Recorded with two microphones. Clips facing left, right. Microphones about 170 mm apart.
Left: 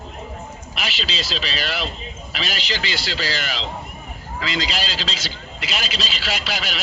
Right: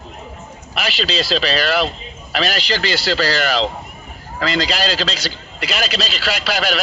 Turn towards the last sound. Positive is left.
turn(degrees=-45)  # may be behind; listen again after turning